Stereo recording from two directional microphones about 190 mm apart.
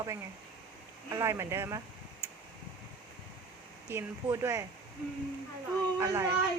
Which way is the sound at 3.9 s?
15° right (ahead or behind).